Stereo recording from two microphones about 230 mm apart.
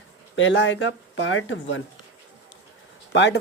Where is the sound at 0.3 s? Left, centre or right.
Left.